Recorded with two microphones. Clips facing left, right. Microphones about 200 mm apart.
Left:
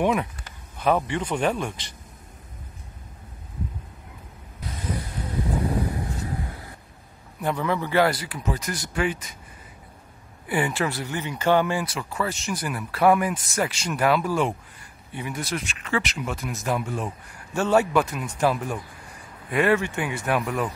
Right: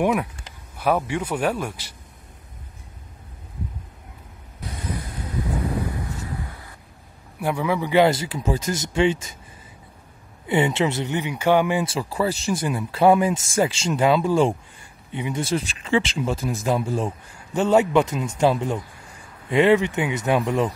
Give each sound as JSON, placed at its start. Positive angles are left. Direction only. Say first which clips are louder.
{"t": 0.0, "sound": "speech", "louder": "right 1 dB", "side_deg": -5}
{"t": 7.3, "sound": "speech", "louder": "right 2 dB", "side_deg": -10}
{"t": 10.4, "sound": "speech", "louder": "right 4 dB", "side_deg": -25}
{"t": 11.8, "sound": "speech", "louder": "right 5 dB", "side_deg": -30}
{"t": 17.6, "sound": "speech", "louder": "right 3 dB", "side_deg": -20}